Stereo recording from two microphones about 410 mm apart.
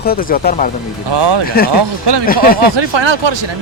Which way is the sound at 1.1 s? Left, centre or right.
Right.